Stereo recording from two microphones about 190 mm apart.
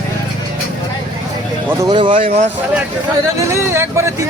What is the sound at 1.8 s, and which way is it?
Speech, 25° right (ahead or behind).